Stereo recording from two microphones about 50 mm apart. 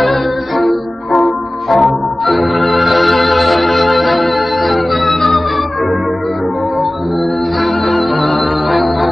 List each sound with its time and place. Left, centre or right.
0.0 s music: centre
1.7 s organ: centre
7.9 s music: centre